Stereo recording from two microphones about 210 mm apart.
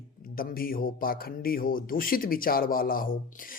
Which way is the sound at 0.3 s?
45° left (ahead or behind).